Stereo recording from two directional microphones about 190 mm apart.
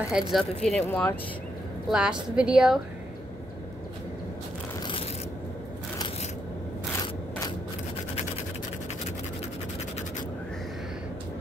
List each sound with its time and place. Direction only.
0.1 s speech: centre (ahead or behind)
1.9 s speech: 5° right (ahead or behind)
7.0 s a sound: 20° left (ahead or behind)